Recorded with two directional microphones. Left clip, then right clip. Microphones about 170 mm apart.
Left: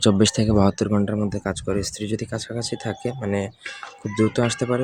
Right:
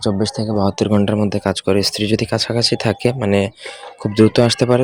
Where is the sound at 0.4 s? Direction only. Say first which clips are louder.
Right 4 dB; 10° left (ahead or behind).